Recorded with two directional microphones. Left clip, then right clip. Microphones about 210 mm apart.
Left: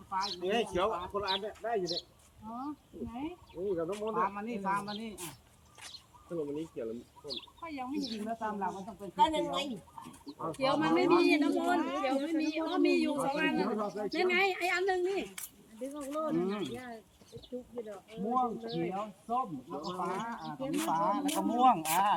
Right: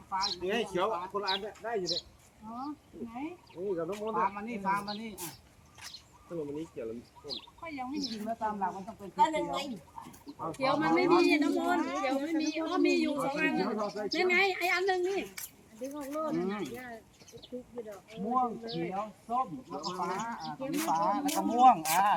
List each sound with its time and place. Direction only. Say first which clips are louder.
0.1 s speech: right 2 dB; 5° left (ahead or behind)
0.4 s speech: left 3 dB; 15° left (ahead or behind)
3.8 s speech: right 1 dB; 15° left (ahead or behind)
7.3 s speech: right 1 dB; 10° left (ahead or behind)
10.4 s speech: right 1 dB; 15° left (ahead or behind)
13.7 s speech: right 1 dB; 5° left (ahead or behind)